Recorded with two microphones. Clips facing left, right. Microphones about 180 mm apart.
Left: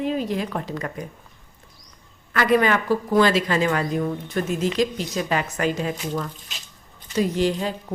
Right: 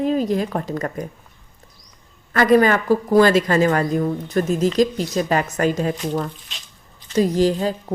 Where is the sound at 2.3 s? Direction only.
40° right (ahead or behind).